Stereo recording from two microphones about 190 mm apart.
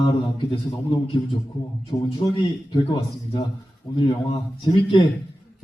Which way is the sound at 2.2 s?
25° left (ahead or behind).